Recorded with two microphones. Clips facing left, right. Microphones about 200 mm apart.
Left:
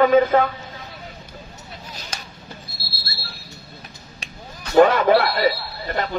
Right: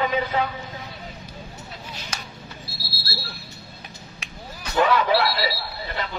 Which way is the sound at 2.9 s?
10° right (ahead or behind).